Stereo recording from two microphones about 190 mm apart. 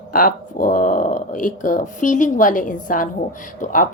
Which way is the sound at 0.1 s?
50° left (ahead or behind).